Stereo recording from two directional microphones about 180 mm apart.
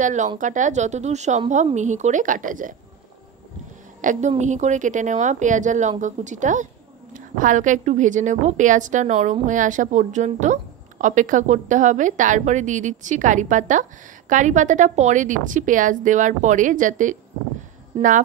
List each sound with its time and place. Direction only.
0.0 s a woman's voice: 45° right (ahead or behind)
4.0 s a woman's voice: 45° right (ahead or behind)